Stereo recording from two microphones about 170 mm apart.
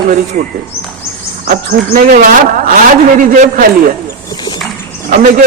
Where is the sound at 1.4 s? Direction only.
55° right (ahead or behind).